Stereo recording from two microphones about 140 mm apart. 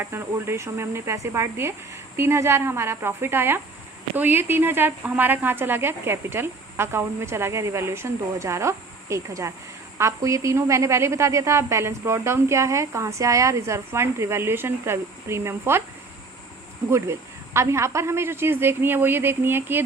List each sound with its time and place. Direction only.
0.0 s a woman's voice: 15° right (ahead or behind)
16.9 s a woman's voice: 20° right (ahead or behind)